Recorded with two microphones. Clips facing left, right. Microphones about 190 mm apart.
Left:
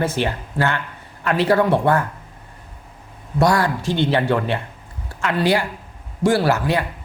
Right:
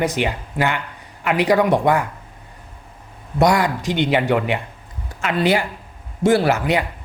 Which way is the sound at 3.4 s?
20° right (ahead or behind).